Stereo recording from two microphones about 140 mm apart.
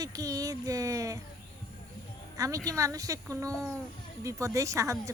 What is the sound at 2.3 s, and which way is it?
A woman's voice, 25° right (ahead or behind).